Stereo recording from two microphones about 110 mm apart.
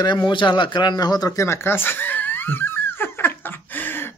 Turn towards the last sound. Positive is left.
turn(degrees=20)  # may be behind; listen again after turning